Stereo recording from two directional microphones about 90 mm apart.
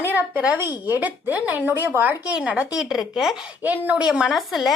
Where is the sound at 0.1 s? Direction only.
20° right (ahead or behind).